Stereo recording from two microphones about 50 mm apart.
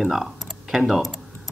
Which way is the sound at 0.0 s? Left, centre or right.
Centre.